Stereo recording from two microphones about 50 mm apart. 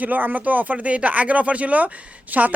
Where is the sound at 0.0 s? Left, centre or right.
Right.